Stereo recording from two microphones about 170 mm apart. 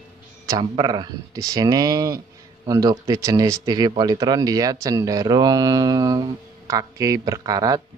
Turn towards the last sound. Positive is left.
turn(degrees=-20)  # may be behind; listen again after turning